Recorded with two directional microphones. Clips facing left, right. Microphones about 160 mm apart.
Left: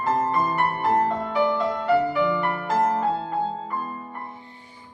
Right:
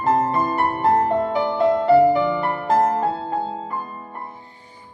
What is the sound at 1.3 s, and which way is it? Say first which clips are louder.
Music: right 2 dB; 30° right (ahead or behind).